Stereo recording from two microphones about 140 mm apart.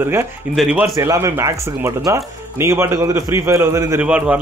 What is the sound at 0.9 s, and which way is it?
Speech, 20° right (ahead or behind).